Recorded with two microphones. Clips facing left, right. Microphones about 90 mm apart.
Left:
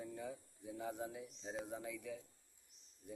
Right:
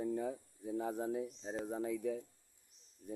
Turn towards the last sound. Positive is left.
turn(degrees=-40)  # may be behind; listen again after turning